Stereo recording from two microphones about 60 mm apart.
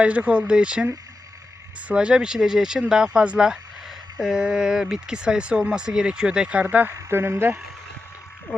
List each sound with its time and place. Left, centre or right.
0.0 s speech: right
1.9 s speech: centre
7.1 s speech: right